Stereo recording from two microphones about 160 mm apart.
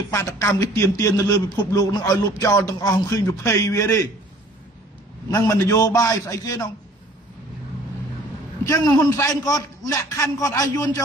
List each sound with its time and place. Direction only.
0.1 s a man's voice: 20° left (ahead or behind)
5.3 s a man's voice: 20° left (ahead or behind)
8.6 s a man's voice: 20° left (ahead or behind)